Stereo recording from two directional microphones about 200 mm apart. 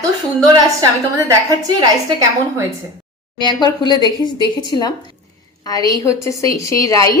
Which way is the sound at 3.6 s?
20° left (ahead or behind).